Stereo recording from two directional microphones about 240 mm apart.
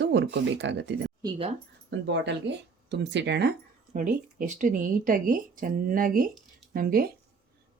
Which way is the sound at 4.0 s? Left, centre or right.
Right.